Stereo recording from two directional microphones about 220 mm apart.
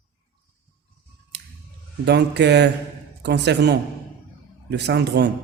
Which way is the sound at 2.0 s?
50° right (ahead or behind).